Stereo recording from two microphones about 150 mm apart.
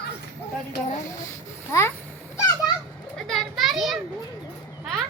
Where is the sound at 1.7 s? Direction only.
20° left (ahead or behind).